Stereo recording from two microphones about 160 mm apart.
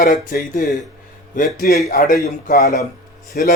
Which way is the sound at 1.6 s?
70° left (ahead or behind).